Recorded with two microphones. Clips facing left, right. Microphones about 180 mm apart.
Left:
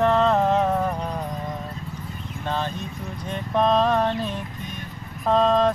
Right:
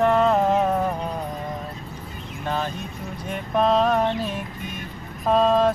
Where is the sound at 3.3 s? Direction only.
10° right (ahead or behind).